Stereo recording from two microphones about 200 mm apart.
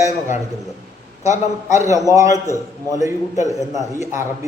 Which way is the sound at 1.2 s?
15° right (ahead or behind).